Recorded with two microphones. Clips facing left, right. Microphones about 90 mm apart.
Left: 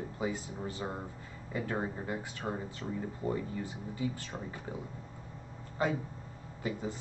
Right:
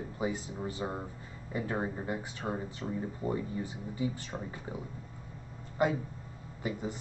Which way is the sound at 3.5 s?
25° right (ahead or behind).